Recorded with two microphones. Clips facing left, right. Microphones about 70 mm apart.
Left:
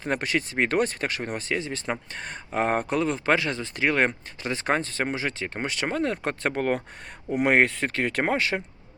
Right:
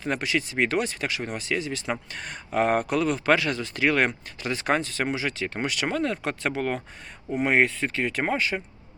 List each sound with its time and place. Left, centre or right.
0.0 s speech: left
7.4 s speech: left